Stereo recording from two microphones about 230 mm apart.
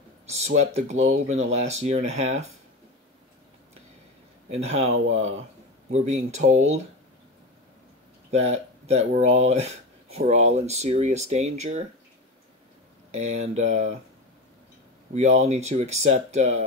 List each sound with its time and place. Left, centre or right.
0.5 s speech: right
4.5 s speech: right
8.3 s speech: right
13.1 s speech: right
15.1 s speech: right